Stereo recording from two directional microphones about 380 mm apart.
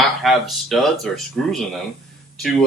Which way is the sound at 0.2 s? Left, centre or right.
Centre.